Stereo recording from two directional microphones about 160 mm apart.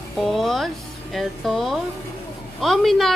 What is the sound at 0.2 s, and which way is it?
Speech, centre (ahead or behind).